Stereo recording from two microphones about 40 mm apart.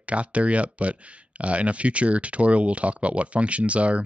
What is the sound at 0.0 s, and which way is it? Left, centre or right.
Speech, right.